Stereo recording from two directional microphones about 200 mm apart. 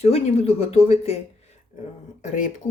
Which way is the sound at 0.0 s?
30° left (ahead or behind).